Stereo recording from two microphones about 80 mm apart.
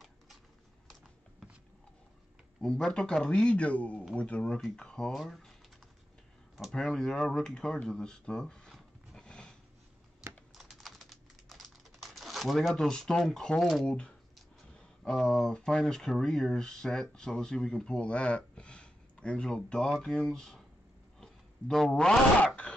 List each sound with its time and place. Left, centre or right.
2.6 s a man's voice: centre
6.7 s speech: centre
10.5 s typing: centre
13.8 s a man's voice: centre
21.2 s a sound: centre